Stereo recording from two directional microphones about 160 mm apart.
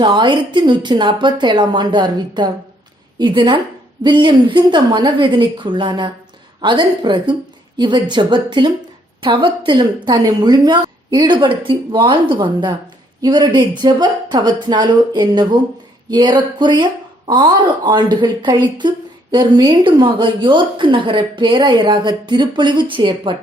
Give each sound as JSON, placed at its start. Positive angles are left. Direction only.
{"t": 0.0, "sound": "speech", "side_deg": -30}